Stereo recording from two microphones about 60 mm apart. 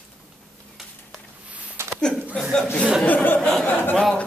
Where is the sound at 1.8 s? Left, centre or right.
Right.